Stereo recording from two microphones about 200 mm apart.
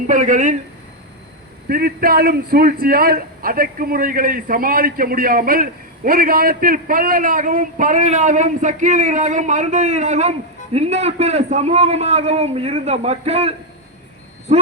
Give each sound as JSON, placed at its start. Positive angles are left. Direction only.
{"t": 0.1, "sound": "a man's voice", "side_deg": -40}
{"t": 1.7, "sound": "a man's voice", "side_deg": -45}